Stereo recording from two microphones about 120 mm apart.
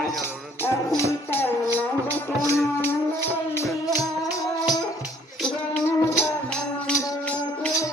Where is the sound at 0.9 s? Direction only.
20° left (ahead or behind).